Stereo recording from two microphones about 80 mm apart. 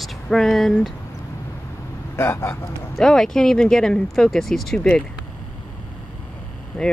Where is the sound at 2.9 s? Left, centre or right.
Centre.